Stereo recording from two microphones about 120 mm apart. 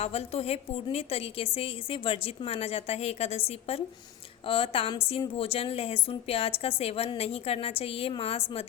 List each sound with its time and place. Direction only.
0.0 s a woman's voice: 60° left (ahead or behind)